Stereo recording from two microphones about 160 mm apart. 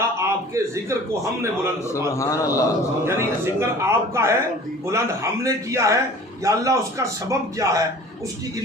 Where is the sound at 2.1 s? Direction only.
20° left (ahead or behind).